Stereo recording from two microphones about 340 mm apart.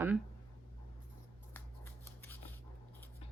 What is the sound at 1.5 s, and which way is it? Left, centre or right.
Scissors, centre.